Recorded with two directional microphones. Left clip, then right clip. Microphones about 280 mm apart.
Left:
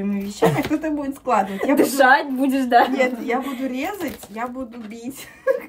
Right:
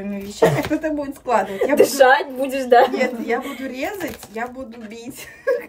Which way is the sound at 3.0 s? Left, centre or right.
Centre.